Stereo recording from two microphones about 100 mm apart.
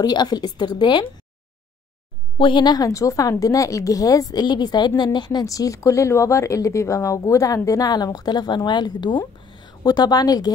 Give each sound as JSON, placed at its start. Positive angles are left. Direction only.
{"t": 0.0, "sound": "a woman's voice", "side_deg": 45}
{"t": 2.3, "sound": "speech", "side_deg": 55}
{"t": 5.4, "sound": "speech", "side_deg": 35}